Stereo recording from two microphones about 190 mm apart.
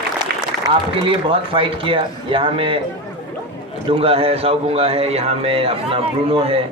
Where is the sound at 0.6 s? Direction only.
25° right (ahead or behind).